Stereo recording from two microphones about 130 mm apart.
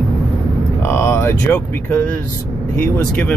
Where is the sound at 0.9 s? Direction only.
20° left (ahead or behind).